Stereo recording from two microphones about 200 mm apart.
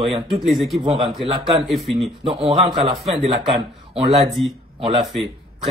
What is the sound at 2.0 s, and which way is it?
A man's voice, 30° right (ahead or behind).